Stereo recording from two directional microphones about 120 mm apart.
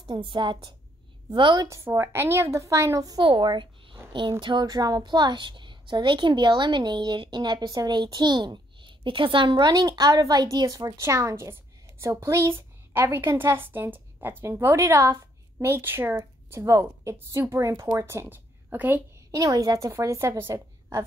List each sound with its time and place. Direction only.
0.0 s a woman's voice: 40° right (ahead or behind)
1.9 s a woman's voice: 20° right (ahead or behind)
3.2 s a woman's voice: 40° right (ahead or behind); by 19.0 s 15° right (ahead or behind)
19.3 s a woman's voice: 30° right (ahead or behind)